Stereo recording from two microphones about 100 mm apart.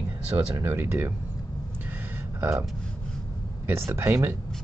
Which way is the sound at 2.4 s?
30° right (ahead or behind).